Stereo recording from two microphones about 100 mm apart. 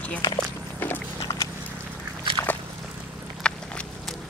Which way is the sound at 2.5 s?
15° left (ahead or behind).